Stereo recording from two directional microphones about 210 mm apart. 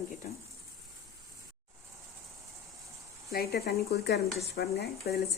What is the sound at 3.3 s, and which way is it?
Speech, 50° left (ahead or behind).